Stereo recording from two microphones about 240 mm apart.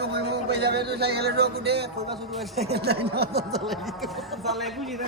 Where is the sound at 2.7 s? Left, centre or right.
Right.